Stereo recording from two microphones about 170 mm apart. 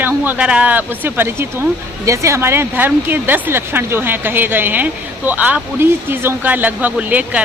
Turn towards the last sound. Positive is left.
turn(degrees=-10)  # may be behind; listen again after turning